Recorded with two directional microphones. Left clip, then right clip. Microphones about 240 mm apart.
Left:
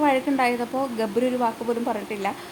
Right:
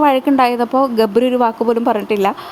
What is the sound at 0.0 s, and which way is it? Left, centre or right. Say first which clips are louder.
Speech: right 9 dB; right.